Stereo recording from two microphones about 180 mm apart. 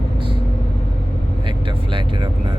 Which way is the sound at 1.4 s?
30° right (ahead or behind).